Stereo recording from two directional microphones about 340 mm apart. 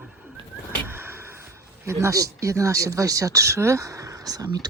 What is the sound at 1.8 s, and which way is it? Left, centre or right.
Speech, centre.